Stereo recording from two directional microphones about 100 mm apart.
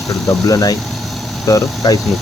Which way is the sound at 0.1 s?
35° left (ahead or behind).